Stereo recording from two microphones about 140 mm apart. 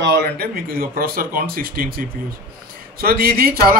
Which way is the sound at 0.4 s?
90° right.